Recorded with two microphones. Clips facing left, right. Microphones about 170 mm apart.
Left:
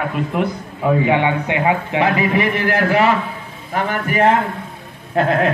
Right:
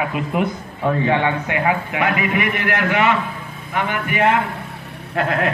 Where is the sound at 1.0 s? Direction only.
15° left (ahead or behind); by 4.4 s 35° left (ahead or behind).